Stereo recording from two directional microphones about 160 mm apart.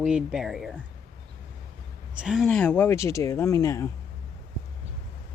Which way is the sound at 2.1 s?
5° right (ahead or behind).